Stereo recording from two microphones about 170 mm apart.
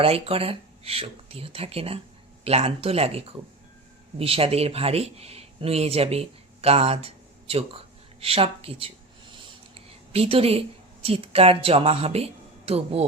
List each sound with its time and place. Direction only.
0.0 s a man's voice: 35° right (ahead or behind)